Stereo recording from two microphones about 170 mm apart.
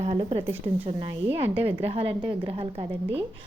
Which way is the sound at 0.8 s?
35° right (ahead or behind).